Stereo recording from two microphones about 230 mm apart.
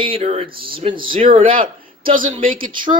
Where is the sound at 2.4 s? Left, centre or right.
Right.